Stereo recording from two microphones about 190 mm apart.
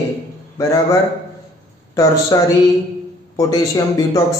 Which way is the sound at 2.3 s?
15° left (ahead or behind).